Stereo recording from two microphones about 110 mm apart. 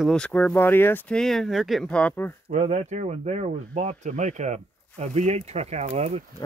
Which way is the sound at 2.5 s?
90° right.